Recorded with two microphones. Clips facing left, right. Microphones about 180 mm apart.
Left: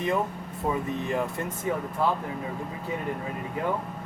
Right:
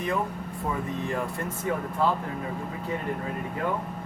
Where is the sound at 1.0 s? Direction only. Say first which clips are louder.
Left 1 dB; 20° left (ahead or behind).